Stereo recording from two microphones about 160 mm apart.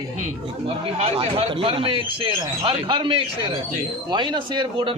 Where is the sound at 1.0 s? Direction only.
40° right (ahead or behind).